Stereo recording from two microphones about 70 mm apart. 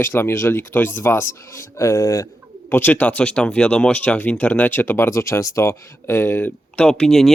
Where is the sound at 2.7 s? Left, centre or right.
Left.